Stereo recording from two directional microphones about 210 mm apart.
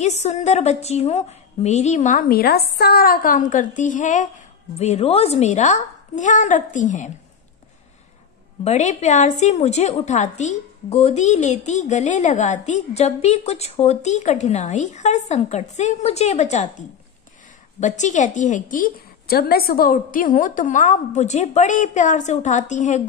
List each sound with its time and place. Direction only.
0.0 s a woman's voice: 30° left (ahead or behind)
8.6 s a woman's voice: 35° left (ahead or behind)
17.7 s a woman's voice: 35° left (ahead or behind)